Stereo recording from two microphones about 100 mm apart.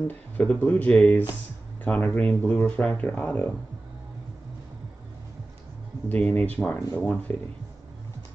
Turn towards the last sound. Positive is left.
turn(degrees=15)  # may be behind; listen again after turning